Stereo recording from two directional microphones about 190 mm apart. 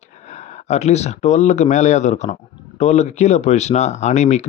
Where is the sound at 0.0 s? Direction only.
40° left (ahead or behind).